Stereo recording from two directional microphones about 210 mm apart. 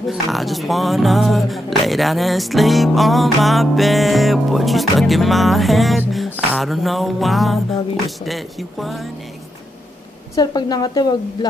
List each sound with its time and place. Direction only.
0.0 s speech: centre (ahead or behind)
10.3 s a woman's voice: 20° left (ahead or behind)